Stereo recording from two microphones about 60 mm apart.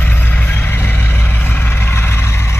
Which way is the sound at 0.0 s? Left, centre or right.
Left.